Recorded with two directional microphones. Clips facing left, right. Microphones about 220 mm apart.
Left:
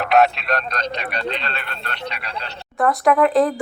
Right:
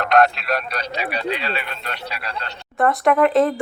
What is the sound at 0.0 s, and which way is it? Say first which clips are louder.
A man's voice: even; 5° left (ahead or behind).